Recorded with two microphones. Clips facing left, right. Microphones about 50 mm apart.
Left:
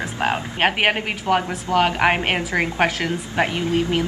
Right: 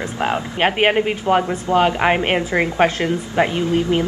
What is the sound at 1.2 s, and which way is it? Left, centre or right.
Speech, right.